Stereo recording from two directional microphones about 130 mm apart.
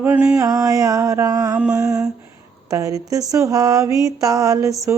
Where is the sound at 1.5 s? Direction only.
5° right (ahead or behind).